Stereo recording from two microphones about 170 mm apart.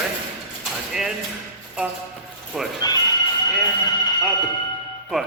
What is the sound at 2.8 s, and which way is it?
Speech, 25° left (ahead or behind).